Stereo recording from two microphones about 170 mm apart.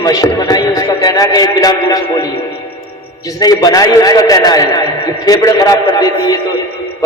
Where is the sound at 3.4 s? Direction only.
20° left (ahead or behind).